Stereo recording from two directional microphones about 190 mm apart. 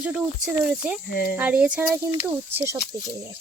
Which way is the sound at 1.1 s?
55° left (ahead or behind).